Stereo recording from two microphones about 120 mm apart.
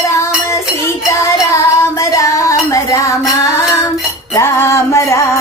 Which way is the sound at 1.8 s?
25° left (ahead or behind).